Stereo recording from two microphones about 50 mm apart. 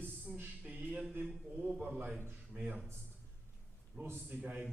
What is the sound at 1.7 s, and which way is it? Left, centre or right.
Speech, centre.